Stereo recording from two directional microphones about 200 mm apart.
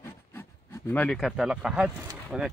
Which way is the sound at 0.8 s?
5° left (ahead or behind).